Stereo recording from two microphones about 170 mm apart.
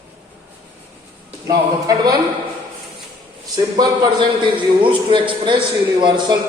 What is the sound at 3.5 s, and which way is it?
A man's voice, 20° right (ahead or behind).